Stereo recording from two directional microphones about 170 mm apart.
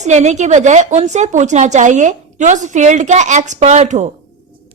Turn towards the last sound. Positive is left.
turn(degrees=-40)  # may be behind; listen again after turning